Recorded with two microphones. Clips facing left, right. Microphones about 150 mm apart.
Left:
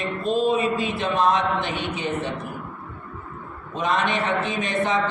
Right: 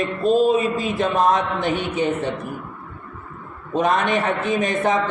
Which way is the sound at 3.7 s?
45° right (ahead or behind).